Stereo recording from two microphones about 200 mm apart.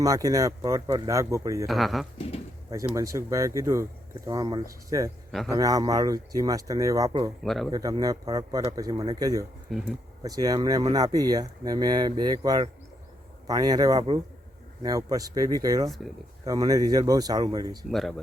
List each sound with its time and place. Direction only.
0.0 s speech: 15° right (ahead or behind)
1.6 s speech: centre (ahead or behind)
2.6 s speech: 15° right (ahead or behind)
7.4 s speech: centre (ahead or behind)
7.7 s speech: 20° right (ahead or behind)
9.6 s speech: centre (ahead or behind)
10.2 s speech: 20° right (ahead or behind)